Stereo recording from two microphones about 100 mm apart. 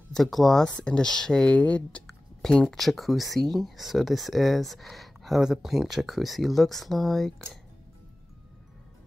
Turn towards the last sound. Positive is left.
turn(degrees=0)  # may be behind; listen again after turning